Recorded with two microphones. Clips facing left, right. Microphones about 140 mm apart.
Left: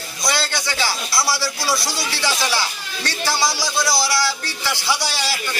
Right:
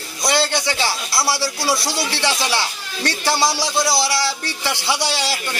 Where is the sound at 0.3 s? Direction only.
25° right (ahead or behind).